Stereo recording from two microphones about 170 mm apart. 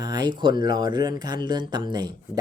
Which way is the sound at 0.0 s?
25° right (ahead or behind).